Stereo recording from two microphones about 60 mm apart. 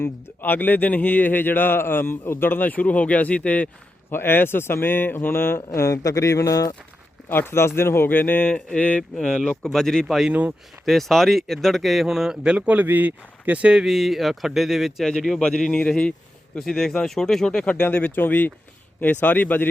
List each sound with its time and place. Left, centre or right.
0.0 s a man's voice: left
4.1 s a man's voice: left
7.3 s a man's voice: left
9.0 s speech: centre
10.1 s speech: centre
12.5 s speech: right
13.8 s speech: centre
15.0 s speech: centre
17.9 s a man's voice: left